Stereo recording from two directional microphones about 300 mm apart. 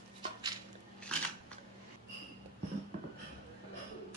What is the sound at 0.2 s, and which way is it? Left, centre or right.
Dishes, centre.